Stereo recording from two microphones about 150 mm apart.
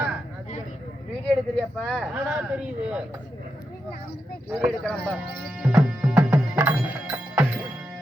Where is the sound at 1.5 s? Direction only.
5° left (ahead or behind).